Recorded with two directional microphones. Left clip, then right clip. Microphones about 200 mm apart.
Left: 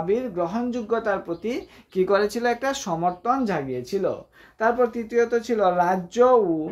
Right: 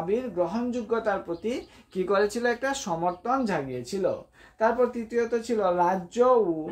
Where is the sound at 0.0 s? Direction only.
35° left (ahead or behind).